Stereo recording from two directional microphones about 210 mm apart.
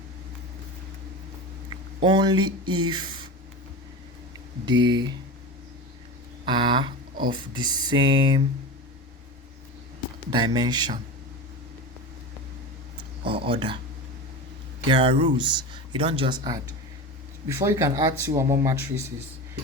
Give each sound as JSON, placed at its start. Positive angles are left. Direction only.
{"t": 2.0, "sound": "speech", "side_deg": -20}
{"t": 4.7, "sound": "speech", "side_deg": -20}
{"t": 6.4, "sound": "speech", "side_deg": -20}
{"t": 10.3, "sound": "speech", "side_deg": -20}
{"t": 13.0, "sound": "speech", "side_deg": -25}
{"t": 14.8, "sound": "speech", "side_deg": -25}